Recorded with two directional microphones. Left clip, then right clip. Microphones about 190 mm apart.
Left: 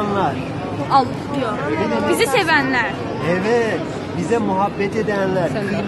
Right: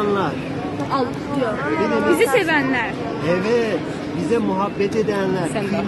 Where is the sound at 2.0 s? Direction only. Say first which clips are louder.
Left 1 dB; centre (ahead or behind).